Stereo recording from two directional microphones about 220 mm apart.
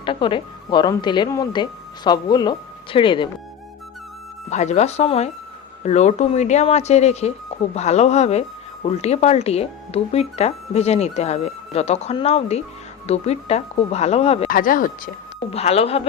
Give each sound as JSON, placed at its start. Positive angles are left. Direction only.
{"t": 0.0, "sound": "speech", "side_deg": 20}
{"t": 4.4, "sound": "speech", "side_deg": 30}
{"t": 14.5, "sound": "speech", "side_deg": 40}
{"t": 15.4, "sound": "speech", "side_deg": 25}